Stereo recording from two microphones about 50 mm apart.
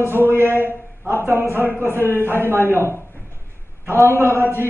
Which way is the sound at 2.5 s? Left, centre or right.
Right.